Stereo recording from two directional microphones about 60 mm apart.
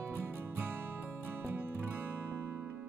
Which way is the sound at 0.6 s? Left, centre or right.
Right.